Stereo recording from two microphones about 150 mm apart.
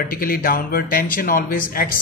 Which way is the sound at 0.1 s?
75° left (ahead or behind).